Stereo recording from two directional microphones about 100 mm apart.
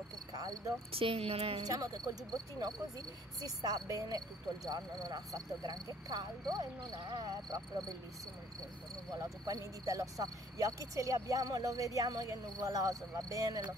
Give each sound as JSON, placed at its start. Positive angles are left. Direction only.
{"t": 0.3, "sound": "cricket", "side_deg": -40}
{"t": 0.9, "sound": "speech", "side_deg": -70}
{"t": 1.7, "sound": "speech", "side_deg": -35}
{"t": 9.2, "sound": "speech", "side_deg": -35}